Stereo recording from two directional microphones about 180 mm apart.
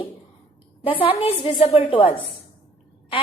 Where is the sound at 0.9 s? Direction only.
30° left (ahead or behind).